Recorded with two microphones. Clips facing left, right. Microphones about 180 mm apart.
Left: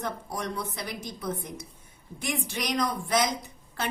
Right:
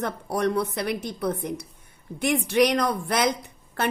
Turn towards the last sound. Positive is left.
turn(degrees=-60)  # may be behind; listen again after turning